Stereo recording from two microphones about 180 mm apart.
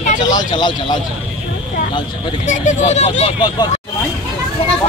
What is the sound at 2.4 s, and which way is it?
Speech, 40° left (ahead or behind).